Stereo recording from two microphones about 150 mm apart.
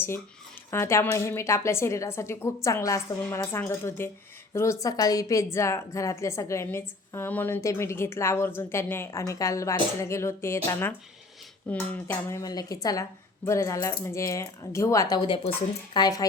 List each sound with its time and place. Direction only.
0.7 s a woman's voice: 15° left (ahead or behind)